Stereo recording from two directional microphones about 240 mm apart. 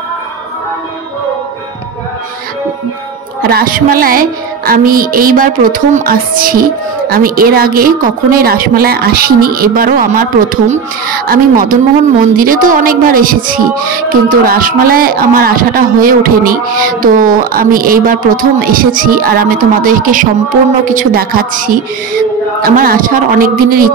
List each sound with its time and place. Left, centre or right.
3.4 s music: right